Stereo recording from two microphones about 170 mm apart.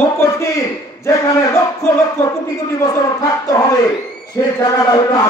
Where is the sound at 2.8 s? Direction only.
20° left (ahead or behind).